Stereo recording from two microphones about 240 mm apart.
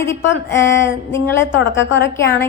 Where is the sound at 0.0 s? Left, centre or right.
Centre.